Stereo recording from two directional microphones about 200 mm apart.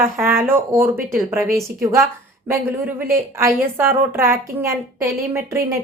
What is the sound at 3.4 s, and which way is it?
A woman's voice, 10° right (ahead or behind).